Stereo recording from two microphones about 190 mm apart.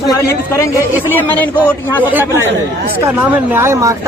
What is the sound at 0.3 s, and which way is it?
A man's voice, 15° left (ahead or behind).